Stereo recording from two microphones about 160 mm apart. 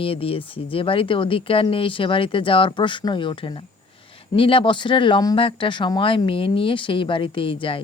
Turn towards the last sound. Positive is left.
turn(degrees=35)  # may be behind; listen again after turning